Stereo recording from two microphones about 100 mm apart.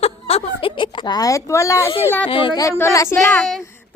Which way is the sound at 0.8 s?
50° left (ahead or behind).